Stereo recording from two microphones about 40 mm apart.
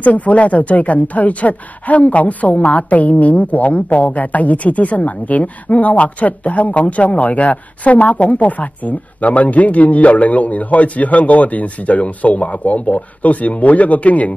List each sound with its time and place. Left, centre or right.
0.0 s a woman's voice: left